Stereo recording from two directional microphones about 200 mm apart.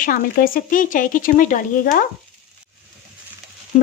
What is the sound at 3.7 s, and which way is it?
Frying, 35° left (ahead or behind).